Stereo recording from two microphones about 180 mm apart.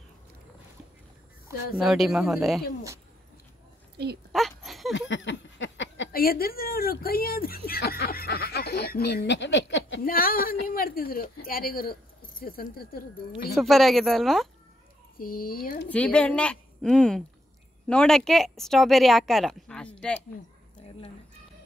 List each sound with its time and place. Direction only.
1.8 s speech: centre (ahead or behind)
4.3 s a sound: centre (ahead or behind)
4.9 s a sound: 90° left
6.1 s speech: 55° left (ahead or behind)
13.6 s speech: centre (ahead or behind)
15.1 s speech: 55° left (ahead or behind)
15.9 s speech: 5° left (ahead or behind)